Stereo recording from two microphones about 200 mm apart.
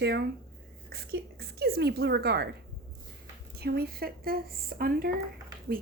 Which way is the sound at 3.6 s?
50° right (ahead or behind).